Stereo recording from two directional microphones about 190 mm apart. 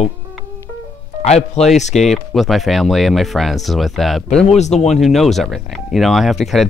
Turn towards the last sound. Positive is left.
turn(degrees=0)  # may be behind; listen again after turning